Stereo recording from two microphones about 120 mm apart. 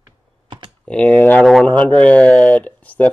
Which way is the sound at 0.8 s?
10° left (ahead or behind).